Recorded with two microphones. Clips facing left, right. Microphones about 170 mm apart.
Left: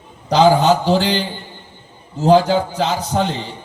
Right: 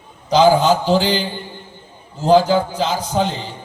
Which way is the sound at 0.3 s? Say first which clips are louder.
Even; 65° left (ahead or behind).